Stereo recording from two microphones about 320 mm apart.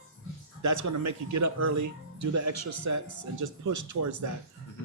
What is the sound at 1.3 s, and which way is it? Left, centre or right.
Speech, right.